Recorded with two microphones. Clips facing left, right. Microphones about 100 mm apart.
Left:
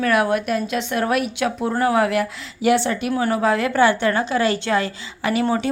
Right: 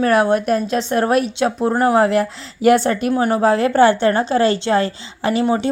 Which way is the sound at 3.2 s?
30° right (ahead or behind).